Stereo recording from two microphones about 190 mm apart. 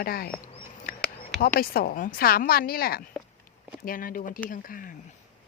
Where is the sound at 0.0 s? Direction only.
50° left (ahead or behind).